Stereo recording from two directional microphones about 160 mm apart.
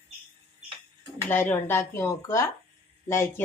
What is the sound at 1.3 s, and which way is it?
Speech, 10° left (ahead or behind).